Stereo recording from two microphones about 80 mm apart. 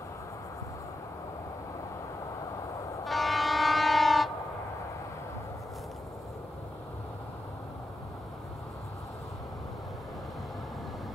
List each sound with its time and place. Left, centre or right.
3.1 s train: centre